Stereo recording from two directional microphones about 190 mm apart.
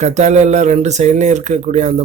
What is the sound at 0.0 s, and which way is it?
Speech, 35° right (ahead or behind).